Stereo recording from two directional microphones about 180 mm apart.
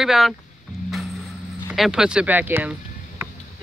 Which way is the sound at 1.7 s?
5° right (ahead or behind).